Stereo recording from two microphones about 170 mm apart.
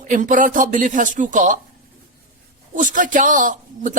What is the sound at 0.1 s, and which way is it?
Speech, 50° right (ahead or behind).